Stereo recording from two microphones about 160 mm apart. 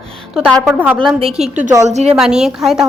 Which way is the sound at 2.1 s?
5° right (ahead or behind).